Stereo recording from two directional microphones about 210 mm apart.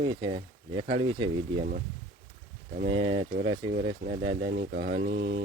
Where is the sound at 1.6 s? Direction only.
45° right (ahead or behind).